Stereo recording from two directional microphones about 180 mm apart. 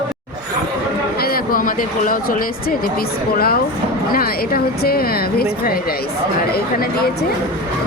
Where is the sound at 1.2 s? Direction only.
55° left (ahead or behind).